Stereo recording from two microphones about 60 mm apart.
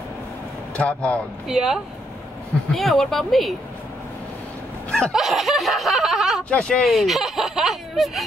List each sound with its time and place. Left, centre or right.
0.7 s speech: left
1.5 s speech: centre
2.7 s snicker: centre
5.1 s snicker: centre
6.5 s speech: centre
6.9 s snicker: centre